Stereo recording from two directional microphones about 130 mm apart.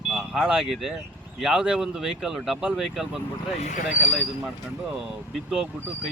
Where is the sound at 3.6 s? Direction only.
75° left (ahead or behind).